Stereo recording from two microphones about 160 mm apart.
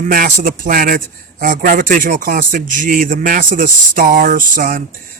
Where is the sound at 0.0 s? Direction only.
55° right (ahead or behind).